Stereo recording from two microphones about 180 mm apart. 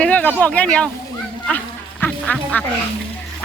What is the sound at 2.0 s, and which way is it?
Speech, 10° left (ahead or behind).